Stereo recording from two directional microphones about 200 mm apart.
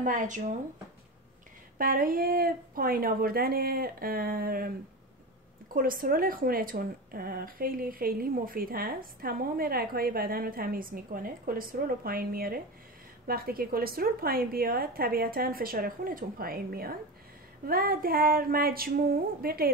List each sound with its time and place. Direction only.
0.0 s speech: 40° right (ahead or behind)
1.8 s speech: 45° right (ahead or behind)